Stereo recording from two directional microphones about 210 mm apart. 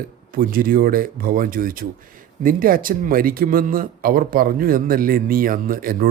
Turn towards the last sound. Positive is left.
turn(degrees=-45)  # may be behind; listen again after turning